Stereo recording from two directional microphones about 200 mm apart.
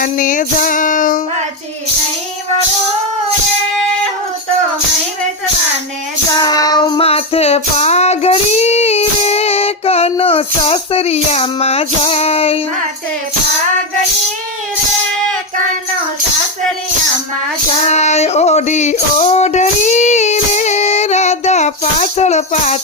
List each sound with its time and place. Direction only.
0.0 s female singing: 40° left (ahead or behind)
6.4 s music: 20° left (ahead or behind)
17.8 s music: 35° left (ahead or behind)